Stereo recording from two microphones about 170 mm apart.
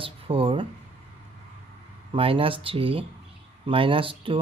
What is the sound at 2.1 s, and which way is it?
Speech, 30° right (ahead or behind).